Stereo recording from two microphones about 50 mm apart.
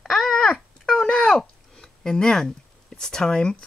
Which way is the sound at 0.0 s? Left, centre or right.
Centre.